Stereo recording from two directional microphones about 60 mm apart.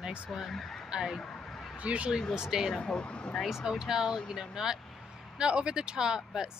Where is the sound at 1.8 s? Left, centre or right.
Centre.